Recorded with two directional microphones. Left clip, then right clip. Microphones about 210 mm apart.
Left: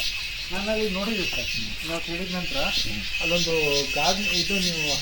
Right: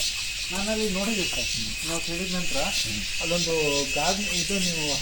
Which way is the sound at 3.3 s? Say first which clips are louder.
Left 2 dB; 10° left (ahead or behind).